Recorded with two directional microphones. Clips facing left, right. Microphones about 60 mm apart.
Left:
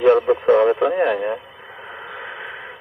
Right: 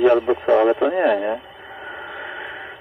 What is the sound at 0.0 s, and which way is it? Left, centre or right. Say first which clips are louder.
Speech: left 1 dB; centre.